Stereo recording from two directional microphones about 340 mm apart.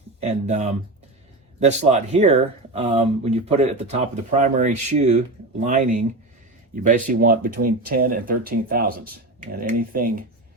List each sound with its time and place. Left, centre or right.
0.2 s speech: centre